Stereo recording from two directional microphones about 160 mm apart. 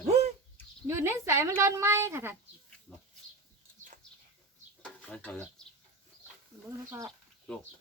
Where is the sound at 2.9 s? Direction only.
10° left (ahead or behind).